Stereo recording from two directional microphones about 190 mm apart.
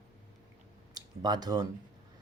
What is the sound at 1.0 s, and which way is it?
Speech, 20° right (ahead or behind).